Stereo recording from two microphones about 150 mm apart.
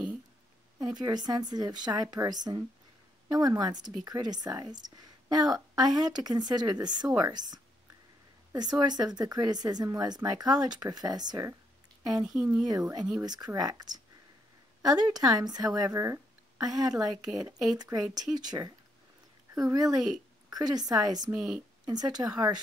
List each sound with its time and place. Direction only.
0.7 s speech: 25° right (ahead or behind)